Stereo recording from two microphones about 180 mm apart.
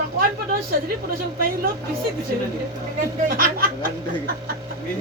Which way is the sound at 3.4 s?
50° right (ahead or behind).